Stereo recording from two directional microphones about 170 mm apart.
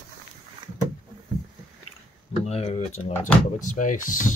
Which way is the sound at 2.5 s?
40° left (ahead or behind).